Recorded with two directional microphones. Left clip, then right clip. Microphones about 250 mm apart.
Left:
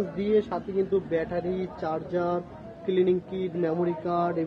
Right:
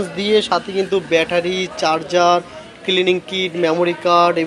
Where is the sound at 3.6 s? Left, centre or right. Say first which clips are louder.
Right 11 dB; right.